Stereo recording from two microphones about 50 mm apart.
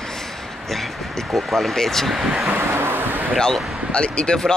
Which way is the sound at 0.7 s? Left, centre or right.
Centre.